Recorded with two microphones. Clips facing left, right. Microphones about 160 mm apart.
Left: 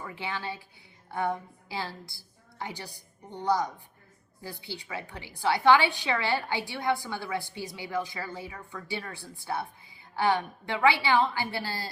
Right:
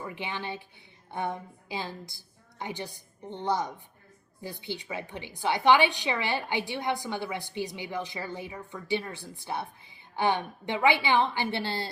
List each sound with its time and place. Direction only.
0.0 s a woman's voice: 20° right (ahead or behind)
1.7 s a woman's voice: 20° right (ahead or behind)